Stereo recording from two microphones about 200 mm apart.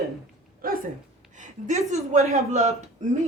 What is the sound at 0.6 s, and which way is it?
Dog, 45° right (ahead or behind).